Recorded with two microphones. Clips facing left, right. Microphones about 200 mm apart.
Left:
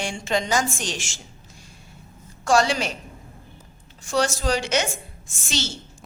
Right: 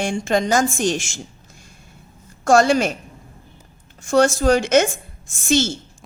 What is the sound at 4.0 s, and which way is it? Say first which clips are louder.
A woman's voice: right 7 dB; 50° right (ahead or behind).